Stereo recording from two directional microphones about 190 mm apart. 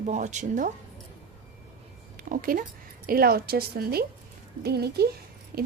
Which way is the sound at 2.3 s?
45° right (ahead or behind).